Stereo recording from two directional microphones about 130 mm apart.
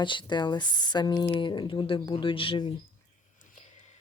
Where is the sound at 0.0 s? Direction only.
40° left (ahead or behind).